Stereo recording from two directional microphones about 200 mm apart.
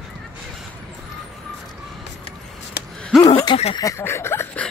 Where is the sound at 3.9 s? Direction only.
15° left (ahead or behind).